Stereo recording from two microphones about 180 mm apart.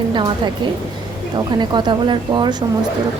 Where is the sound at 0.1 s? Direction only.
25° right (ahead or behind).